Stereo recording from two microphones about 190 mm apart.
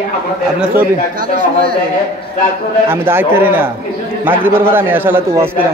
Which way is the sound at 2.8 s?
10° right (ahead or behind).